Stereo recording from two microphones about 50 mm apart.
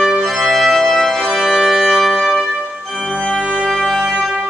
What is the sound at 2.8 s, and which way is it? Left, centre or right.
Organ, centre.